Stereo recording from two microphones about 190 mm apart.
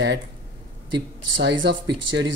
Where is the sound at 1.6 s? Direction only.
65° right (ahead or behind).